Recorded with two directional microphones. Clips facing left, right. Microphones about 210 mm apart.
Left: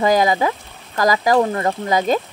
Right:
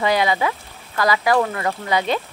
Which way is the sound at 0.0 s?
45° left (ahead or behind).